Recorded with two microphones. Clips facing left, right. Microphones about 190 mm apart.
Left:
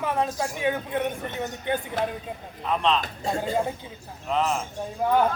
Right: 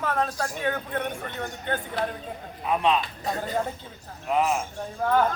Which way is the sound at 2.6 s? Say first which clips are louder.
Right 1 dB; 10° right (ahead or behind).